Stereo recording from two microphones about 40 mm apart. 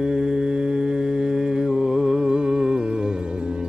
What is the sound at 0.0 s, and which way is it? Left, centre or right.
Mantra, centre.